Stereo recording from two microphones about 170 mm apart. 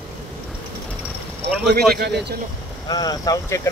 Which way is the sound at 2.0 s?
75° right (ahead or behind).